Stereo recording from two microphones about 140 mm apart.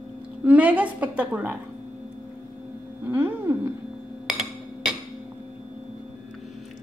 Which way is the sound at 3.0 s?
15° right (ahead or behind).